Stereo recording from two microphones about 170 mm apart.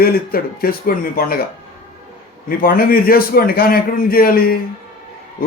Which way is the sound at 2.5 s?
55° left (ahead or behind).